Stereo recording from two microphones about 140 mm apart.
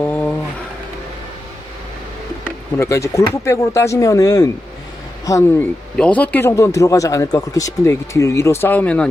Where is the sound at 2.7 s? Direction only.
20° left (ahead or behind).